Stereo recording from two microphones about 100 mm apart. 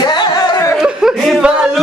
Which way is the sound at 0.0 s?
45° left (ahead or behind).